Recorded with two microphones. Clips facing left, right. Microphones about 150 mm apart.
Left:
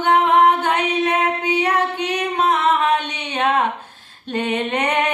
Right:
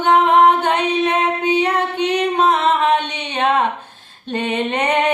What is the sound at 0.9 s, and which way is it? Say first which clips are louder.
Music: right 2 dB; 25° right (ahead or behind).